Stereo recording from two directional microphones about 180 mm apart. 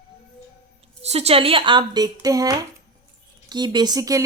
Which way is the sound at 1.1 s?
35° right (ahead or behind).